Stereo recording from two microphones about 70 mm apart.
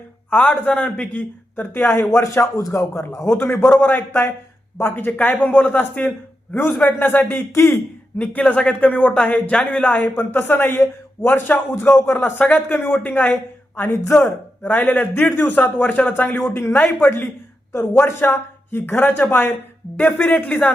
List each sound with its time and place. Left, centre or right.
0.3 s a man's voice: left
2.1 s speech: left
3.3 s a man's voice: left
8.2 s a man's voice: left